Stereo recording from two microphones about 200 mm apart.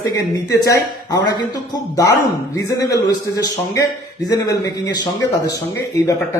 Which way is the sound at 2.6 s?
15° left (ahead or behind).